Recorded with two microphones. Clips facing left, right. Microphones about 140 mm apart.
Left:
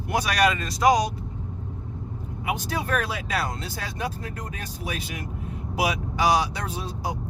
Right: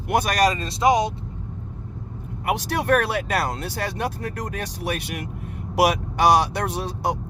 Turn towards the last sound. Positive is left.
turn(degrees=-70)  # may be behind; listen again after turning